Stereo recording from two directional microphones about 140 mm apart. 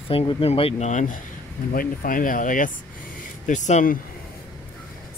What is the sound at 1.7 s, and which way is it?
Speech, 85° left.